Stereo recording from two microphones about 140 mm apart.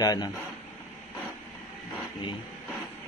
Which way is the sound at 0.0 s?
25° left (ahead or behind).